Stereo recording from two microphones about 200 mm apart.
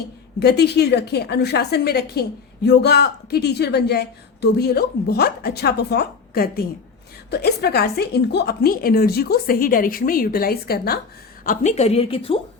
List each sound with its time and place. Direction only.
0.3 s a woman's voice: 55° left (ahead or behind)
11.4 s a woman's voice: 35° left (ahead or behind)